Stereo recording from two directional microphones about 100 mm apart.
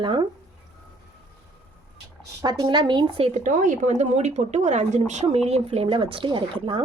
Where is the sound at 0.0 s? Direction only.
55° right (ahead or behind).